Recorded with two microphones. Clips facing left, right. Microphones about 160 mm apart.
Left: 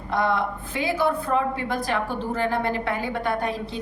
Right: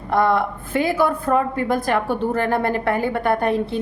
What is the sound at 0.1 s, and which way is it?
A woman's voice, 55° right (ahead or behind).